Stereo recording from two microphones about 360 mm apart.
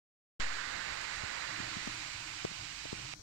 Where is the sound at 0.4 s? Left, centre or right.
Right.